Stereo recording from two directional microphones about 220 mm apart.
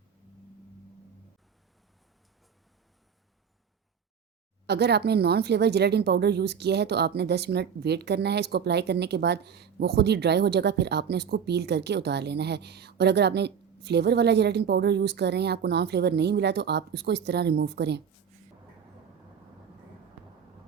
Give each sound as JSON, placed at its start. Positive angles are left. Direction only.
{"t": 4.6, "sound": "speech", "side_deg": -50}